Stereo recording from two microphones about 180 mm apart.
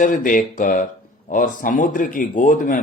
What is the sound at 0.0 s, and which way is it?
Speech, 50° left (ahead or behind).